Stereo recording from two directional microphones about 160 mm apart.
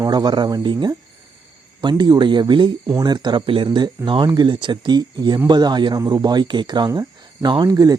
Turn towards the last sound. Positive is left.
turn(degrees=-25)  # may be behind; listen again after turning